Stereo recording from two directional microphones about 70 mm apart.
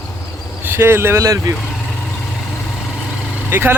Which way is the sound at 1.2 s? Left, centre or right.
Right.